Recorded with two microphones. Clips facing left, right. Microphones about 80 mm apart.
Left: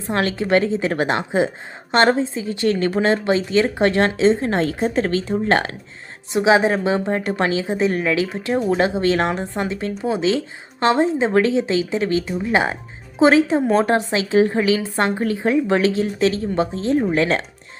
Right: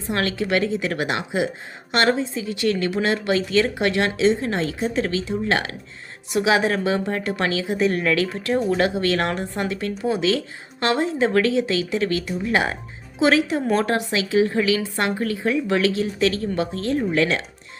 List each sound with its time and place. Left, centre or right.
0.1 s speech: left
6.3 s speech: left
7.9 s a woman's voice: centre
13.1 s speech: left